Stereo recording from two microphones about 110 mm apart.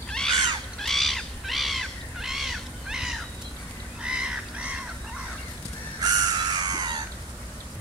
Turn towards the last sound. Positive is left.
turn(degrees=-40)  # may be behind; listen again after turning